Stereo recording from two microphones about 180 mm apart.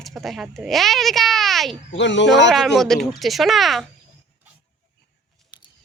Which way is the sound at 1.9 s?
85° left.